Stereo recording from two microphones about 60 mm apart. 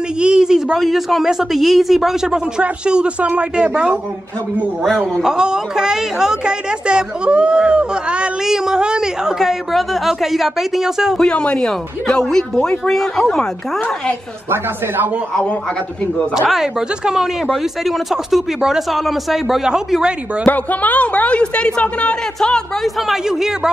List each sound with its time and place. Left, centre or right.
0.2 s a woman's voice: centre
2.6 s a woman's voice: centre
5.2 s a woman's voice: centre
11.1 s speech: centre
16.4 s a woman's voice: centre
20.4 s a woman's voice: left
23.0 s a woman's voice: centre